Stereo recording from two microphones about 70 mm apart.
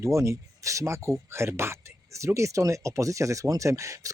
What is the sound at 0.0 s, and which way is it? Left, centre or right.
Speech, right.